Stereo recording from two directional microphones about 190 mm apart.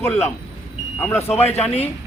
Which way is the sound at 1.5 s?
35° left (ahead or behind).